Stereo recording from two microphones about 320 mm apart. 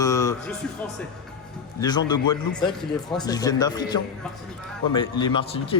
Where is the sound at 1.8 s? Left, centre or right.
Centre.